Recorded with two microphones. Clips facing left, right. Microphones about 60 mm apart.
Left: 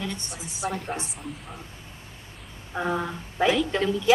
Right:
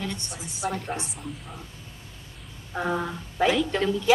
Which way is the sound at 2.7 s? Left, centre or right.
Centre.